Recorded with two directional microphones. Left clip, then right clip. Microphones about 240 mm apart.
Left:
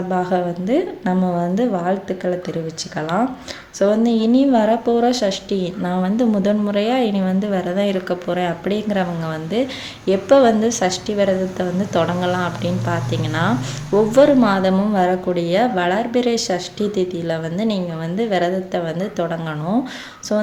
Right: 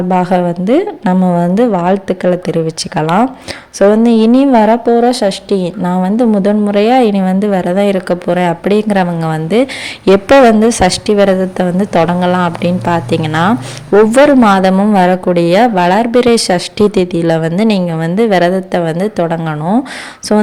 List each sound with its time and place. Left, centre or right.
0.1 s a woman's voice: right